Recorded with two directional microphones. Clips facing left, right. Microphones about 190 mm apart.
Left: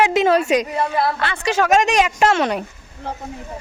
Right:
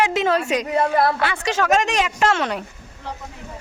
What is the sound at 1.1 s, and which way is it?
Speech, 10° right (ahead or behind).